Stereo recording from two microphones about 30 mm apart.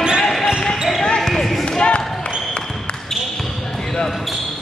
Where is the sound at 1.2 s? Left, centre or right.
Centre.